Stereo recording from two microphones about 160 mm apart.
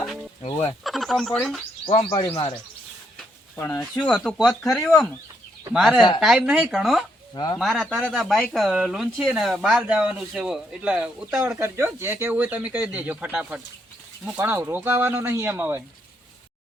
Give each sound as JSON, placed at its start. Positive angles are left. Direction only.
{"t": 0.0, "sound": "chicken", "side_deg": 0}
{"t": 0.4, "sound": "speech", "side_deg": 30}
{"t": 0.9, "sound": "speech", "side_deg": 0}
{"t": 1.9, "sound": "speech", "side_deg": 35}
{"t": 3.2, "sound": "speech", "side_deg": 10}
{"t": 7.3, "sound": "speech", "side_deg": 25}
{"t": 7.6, "sound": "speech", "side_deg": 0}